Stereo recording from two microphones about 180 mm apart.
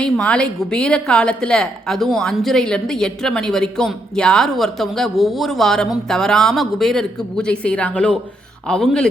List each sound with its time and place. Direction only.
0.0 s a woman's voice: 5° left (ahead or behind)